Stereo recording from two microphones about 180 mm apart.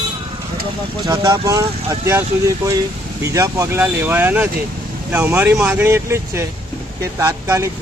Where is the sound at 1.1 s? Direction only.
20° right (ahead or behind).